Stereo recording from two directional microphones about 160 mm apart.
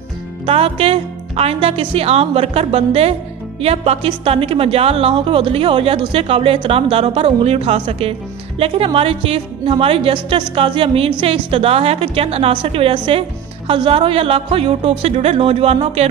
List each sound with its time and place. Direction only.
0.5 s speech: 35° right (ahead or behind)